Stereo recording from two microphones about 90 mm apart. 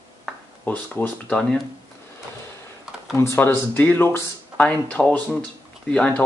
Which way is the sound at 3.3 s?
20° left (ahead or behind).